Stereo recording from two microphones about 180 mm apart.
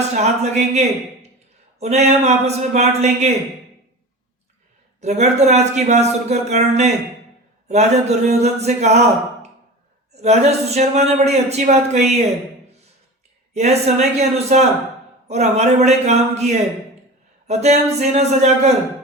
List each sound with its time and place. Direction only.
0.0 s speech: 40° right (ahead or behind)
4.9 s speech: 40° right (ahead or behind)
13.5 s speech: 35° right (ahead or behind)